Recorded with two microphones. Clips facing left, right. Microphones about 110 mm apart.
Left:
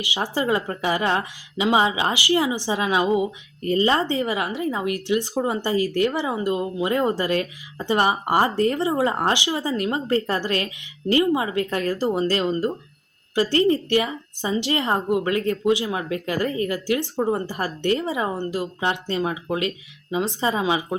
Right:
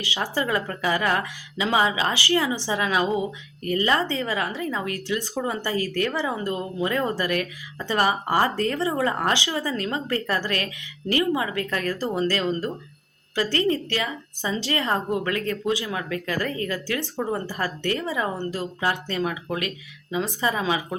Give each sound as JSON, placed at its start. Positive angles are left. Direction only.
{"t": 0.0, "sound": "a woman's voice", "side_deg": 20}